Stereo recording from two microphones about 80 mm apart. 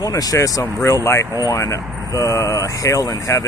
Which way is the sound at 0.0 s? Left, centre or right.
Left.